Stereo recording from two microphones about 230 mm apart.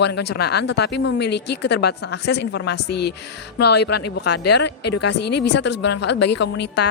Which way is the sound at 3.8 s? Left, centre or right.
Left.